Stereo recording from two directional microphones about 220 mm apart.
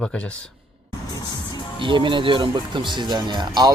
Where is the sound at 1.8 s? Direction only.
20° right (ahead or behind).